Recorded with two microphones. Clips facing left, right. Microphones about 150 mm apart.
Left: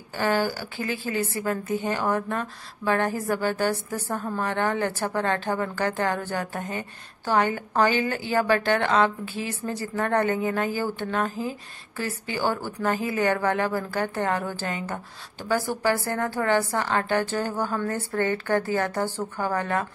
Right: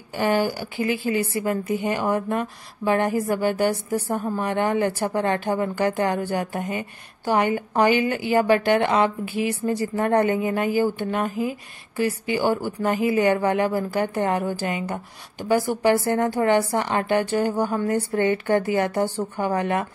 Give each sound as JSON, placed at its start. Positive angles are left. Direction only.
{"t": 0.1, "sound": "speech", "side_deg": -15}